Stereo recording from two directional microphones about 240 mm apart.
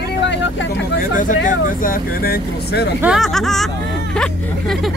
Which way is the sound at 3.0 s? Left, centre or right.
Centre.